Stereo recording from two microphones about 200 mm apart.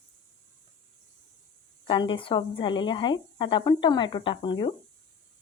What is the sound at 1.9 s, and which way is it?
Speech, 25° left (ahead or behind).